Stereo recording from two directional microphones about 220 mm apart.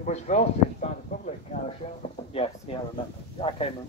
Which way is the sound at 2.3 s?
25° left (ahead or behind).